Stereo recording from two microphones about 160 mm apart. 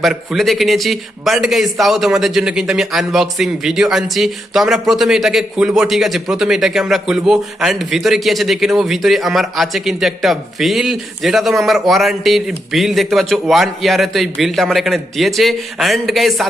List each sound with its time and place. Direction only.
0.0 s a man's voice: centre (ahead or behind)